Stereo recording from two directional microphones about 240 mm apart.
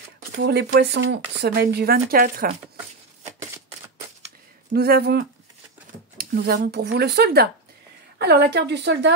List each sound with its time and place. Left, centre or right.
0.4 s speech: right
4.7 s speech: right